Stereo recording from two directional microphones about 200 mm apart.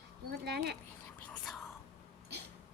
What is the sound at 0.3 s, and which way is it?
Speech, 55° right (ahead or behind).